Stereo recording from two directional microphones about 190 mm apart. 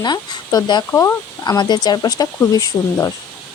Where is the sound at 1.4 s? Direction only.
25° left (ahead or behind).